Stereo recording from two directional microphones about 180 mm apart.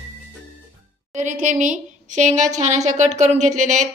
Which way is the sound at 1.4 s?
45° right (ahead or behind).